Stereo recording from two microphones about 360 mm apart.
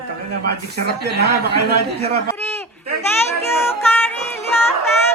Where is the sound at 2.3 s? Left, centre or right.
Centre.